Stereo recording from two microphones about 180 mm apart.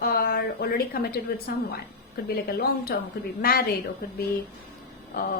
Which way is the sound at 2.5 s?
60° left (ahead or behind).